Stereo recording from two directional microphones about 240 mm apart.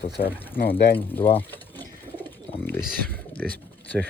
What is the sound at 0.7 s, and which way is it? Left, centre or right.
Speech, centre.